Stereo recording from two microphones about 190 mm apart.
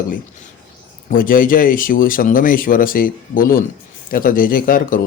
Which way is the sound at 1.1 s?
45° left (ahead or behind).